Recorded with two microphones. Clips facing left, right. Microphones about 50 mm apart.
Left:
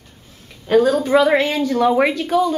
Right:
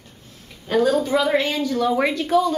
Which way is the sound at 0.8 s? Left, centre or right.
Left.